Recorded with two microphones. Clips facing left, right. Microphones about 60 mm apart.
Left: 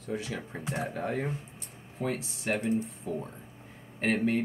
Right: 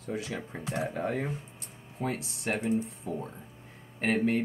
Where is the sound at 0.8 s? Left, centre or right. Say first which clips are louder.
Right 1 dB; centre.